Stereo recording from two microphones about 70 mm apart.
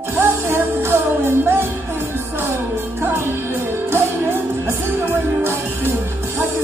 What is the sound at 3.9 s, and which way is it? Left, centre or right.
Music, right.